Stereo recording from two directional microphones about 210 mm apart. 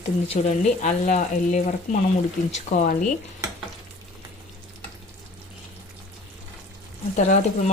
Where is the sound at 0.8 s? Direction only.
35° left (ahead or behind).